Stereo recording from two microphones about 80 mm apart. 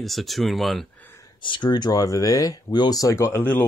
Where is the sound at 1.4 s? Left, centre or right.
Left.